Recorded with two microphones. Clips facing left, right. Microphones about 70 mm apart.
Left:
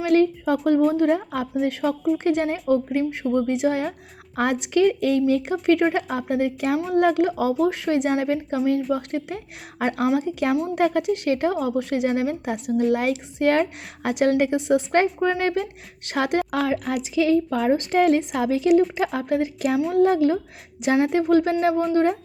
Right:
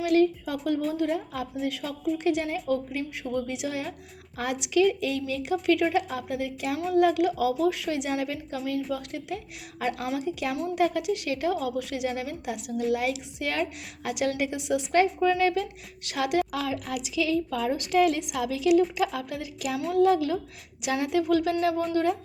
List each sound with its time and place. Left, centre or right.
0.0 s a woman's voice: left